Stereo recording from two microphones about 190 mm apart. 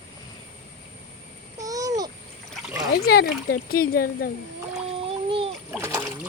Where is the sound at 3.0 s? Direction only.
55° left (ahead or behind).